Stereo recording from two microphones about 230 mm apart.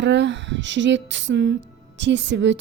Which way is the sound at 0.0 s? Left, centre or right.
Right.